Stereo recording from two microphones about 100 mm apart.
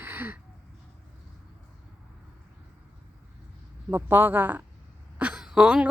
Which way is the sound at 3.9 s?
20° right (ahead or behind).